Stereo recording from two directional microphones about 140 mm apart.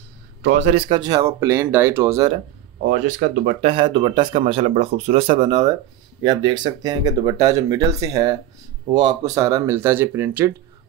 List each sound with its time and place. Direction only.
0.7 s speech: 40° right (ahead or behind)
1.1 s speech: 20° right (ahead or behind)
2.9 s speech: 90° right
3.6 s speech: 40° right (ahead or behind); by 10.5 s 15° right (ahead or behind)